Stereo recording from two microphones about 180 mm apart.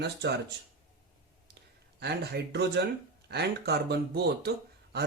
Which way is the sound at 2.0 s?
70° right (ahead or behind).